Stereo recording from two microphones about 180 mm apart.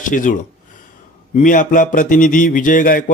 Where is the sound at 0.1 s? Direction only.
45° left (ahead or behind).